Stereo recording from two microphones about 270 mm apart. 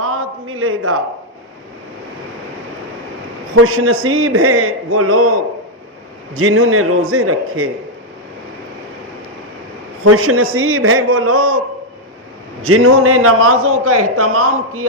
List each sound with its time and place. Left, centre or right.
0.0 s a sound: right
3.5 s a man's voice: right
6.3 s a man's voice: right
10.0 s a man's voice: right
12.6 s a man's voice: right